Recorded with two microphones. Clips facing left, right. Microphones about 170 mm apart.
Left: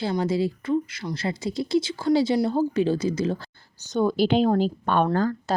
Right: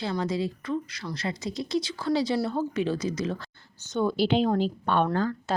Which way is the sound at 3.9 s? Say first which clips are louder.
Left 3 dB; 45° left (ahead or behind).